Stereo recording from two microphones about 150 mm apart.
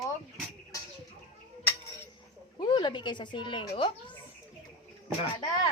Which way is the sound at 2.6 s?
30° left (ahead or behind).